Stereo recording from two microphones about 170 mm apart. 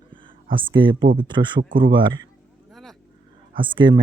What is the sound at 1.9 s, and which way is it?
Speech, 25° right (ahead or behind).